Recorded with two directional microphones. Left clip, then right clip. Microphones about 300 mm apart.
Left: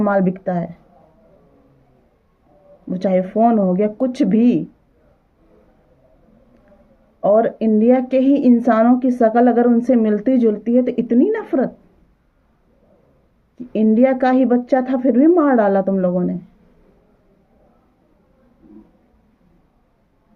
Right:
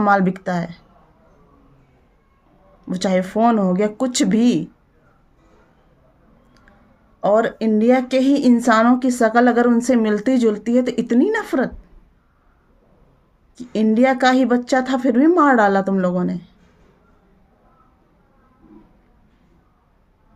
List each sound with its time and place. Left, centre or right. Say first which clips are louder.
0.0 s speech: right 1 dB; centre
2.9 s a woman's voice: left 2 dB; centre
7.2 s a woman's voice: left 2 dB; centre
13.6 s a woman's voice: left 2 dB; centre